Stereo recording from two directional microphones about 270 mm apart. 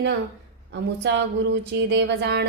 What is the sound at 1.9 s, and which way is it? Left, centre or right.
Speech, right.